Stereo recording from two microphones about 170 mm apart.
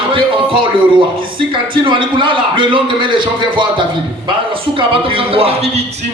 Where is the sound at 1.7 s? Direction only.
30° right (ahead or behind).